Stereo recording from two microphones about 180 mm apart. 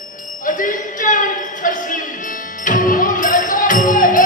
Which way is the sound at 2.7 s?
45° left (ahead or behind).